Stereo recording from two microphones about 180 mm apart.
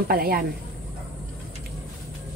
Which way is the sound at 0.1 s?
55° right (ahead or behind).